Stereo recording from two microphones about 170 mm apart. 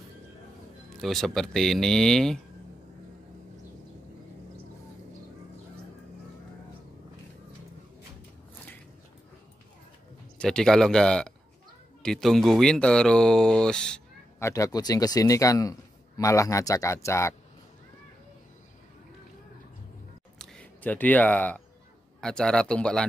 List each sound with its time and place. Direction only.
1.0 s speech: centre (ahead or behind)
10.4 s speech: 5° left (ahead or behind)
14.4 s speech: 20° left (ahead or behind)
20.3 s a sound: 5° left (ahead or behind)
22.2 s speech: 5° left (ahead or behind)